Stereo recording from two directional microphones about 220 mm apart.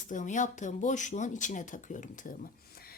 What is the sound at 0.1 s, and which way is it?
A woman's voice, 35° left (ahead or behind).